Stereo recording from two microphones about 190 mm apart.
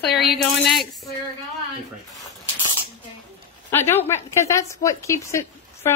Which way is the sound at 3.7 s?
10° left (ahead or behind).